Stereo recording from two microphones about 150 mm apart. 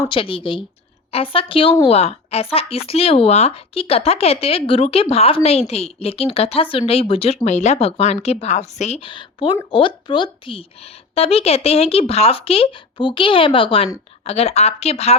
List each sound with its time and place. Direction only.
0.1 s speech: 35° left (ahead or behind)
7.4 s a woman's voice: 50° left (ahead or behind)